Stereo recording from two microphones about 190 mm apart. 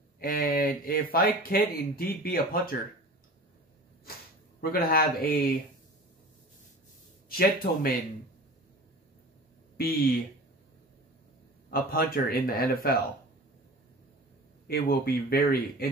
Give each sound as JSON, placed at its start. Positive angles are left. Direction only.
{"t": 0.2, "sound": "speech", "side_deg": 50}
{"t": 4.6, "sound": "speech", "side_deg": 50}
{"t": 7.2, "sound": "speech", "side_deg": 50}
{"t": 9.8, "sound": "speech", "side_deg": 50}
{"t": 11.7, "sound": "speech", "side_deg": 50}
{"t": 14.7, "sound": "speech", "side_deg": 50}